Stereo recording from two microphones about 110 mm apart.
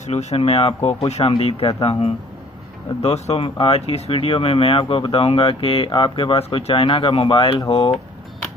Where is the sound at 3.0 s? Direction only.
75° left (ahead or behind).